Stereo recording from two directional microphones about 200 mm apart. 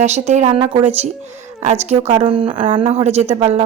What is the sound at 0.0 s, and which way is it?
A woman's voice, 35° right (ahead or behind).